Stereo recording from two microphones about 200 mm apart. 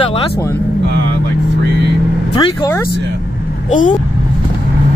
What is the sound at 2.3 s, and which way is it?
Speech, 20° left (ahead or behind).